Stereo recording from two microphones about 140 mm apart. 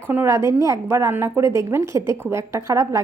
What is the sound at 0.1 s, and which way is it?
A woman's voice, 15° right (ahead or behind).